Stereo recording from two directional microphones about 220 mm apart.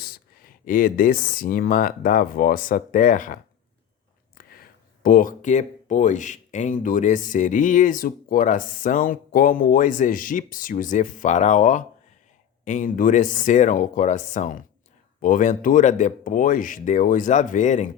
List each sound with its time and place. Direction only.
0.0 s speech: 40° left (ahead or behind)
4.4 s a sound: 40° left (ahead or behind)
5.0 s speech: 40° left (ahead or behind)